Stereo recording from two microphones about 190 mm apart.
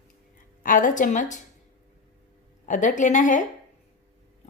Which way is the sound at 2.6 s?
40° left (ahead or behind).